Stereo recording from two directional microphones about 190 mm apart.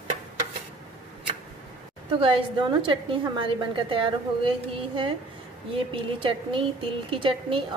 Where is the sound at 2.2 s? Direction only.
25° right (ahead or behind).